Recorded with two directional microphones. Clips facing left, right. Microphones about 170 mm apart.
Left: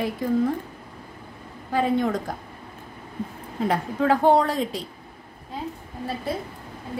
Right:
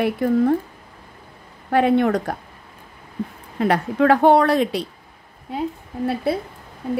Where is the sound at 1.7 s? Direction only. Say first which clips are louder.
Right 6 dB; 70° right (ahead or behind).